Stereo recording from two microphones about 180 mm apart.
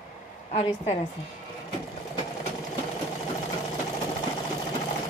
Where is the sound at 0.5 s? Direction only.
35° left (ahead or behind).